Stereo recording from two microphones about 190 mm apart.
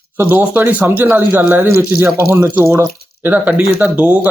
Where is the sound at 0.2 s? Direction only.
10° right (ahead or behind).